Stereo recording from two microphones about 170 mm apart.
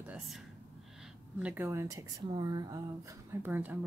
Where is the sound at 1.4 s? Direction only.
10° right (ahead or behind).